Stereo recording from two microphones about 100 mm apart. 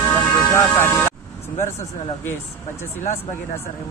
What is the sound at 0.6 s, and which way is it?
Speech, 25° left (ahead or behind).